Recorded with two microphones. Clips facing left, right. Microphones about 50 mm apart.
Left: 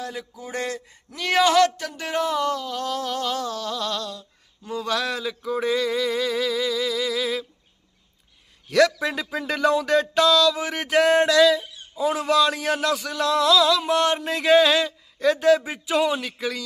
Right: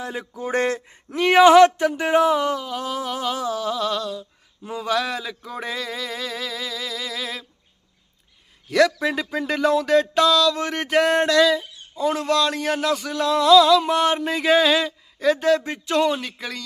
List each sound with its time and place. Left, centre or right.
0.0 s a sound: right
0.3 s speech: right; by 7.4 s centre
8.6 s speech: centre